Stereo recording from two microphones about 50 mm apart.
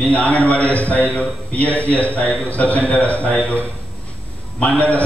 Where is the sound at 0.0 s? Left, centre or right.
Left.